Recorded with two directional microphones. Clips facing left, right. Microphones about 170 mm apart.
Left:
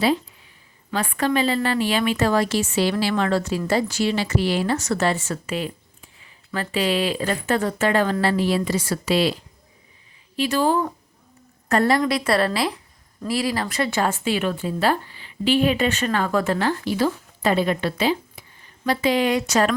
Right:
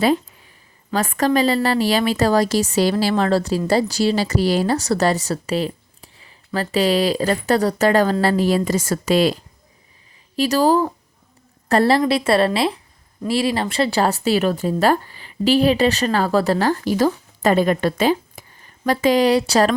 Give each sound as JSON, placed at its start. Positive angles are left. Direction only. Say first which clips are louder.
{"t": 0.9, "sound": "speech", "louder": "right 4 dB", "side_deg": -40}
{"t": 10.3, "sound": "a woman's voice", "louder": "right 4 dB", "side_deg": -40}